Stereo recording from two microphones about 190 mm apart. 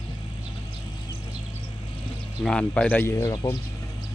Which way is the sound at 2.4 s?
5° left (ahead or behind).